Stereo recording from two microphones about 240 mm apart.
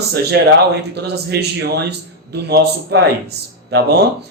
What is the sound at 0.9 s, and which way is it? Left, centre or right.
A man's voice, right.